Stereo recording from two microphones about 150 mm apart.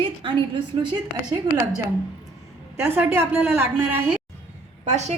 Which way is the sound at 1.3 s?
25° right (ahead or behind).